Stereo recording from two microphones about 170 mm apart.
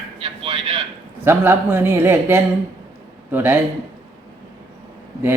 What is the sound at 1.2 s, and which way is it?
Speech, 15° right (ahead or behind).